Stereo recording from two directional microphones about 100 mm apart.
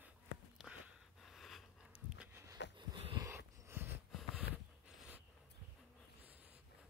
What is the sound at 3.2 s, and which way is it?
Dog, 25° right (ahead or behind).